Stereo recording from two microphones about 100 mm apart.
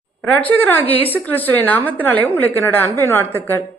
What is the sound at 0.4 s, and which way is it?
A woman's voice, 15° left (ahead or behind).